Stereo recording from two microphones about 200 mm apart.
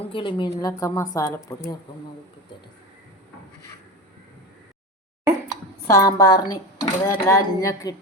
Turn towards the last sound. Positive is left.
turn(degrees=15)  # may be behind; listen again after turning